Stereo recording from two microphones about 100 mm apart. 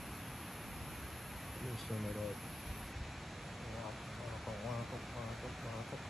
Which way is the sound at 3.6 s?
Centre (ahead or behind).